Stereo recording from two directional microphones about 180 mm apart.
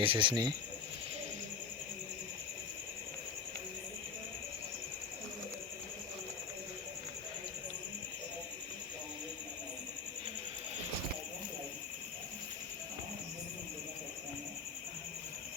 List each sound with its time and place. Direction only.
0.0 s speech: 30° right (ahead or behind)